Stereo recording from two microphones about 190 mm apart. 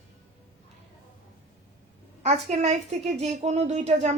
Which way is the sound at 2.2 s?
35° right (ahead or behind).